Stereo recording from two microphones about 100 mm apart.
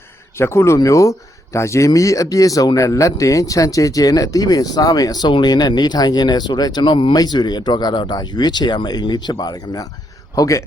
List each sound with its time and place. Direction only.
0.3 s a man's voice: 25° left (ahead or behind)